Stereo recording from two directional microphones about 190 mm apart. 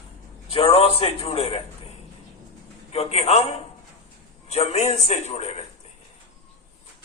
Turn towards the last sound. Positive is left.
turn(degrees=35)  # may be behind; listen again after turning